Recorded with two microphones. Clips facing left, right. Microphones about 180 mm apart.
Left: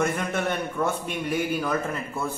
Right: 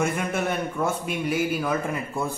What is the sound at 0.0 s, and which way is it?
A man's voice, 5° right (ahead or behind).